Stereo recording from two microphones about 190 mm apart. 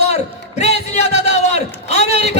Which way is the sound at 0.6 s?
35° left (ahead or behind).